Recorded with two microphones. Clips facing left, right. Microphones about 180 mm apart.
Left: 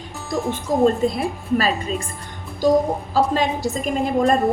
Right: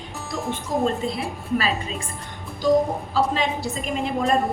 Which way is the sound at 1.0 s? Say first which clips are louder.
Left 7 dB; 40° left (ahead or behind).